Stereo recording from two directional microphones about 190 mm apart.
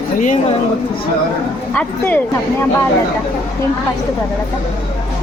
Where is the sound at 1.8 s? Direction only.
10° left (ahead or behind).